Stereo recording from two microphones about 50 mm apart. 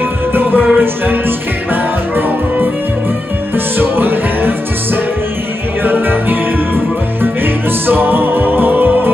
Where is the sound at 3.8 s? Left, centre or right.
Right.